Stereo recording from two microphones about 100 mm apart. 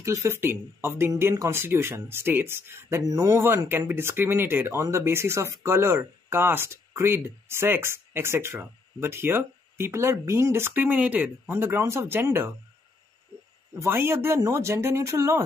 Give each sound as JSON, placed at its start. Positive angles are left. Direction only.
{"t": 0.0, "sound": "speech", "side_deg": -25}
{"t": 3.0, "sound": "speech", "side_deg": -35}
{"t": 3.4, "sound": "speech", "side_deg": -20}
{"t": 13.7, "sound": "speech", "side_deg": -25}